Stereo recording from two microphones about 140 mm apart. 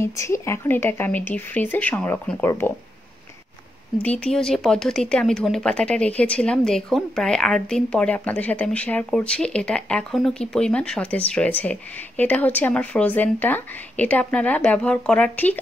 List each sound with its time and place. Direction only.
0.0 s speech: 20° left (ahead or behind)
4.0 s speech: 10° left (ahead or behind)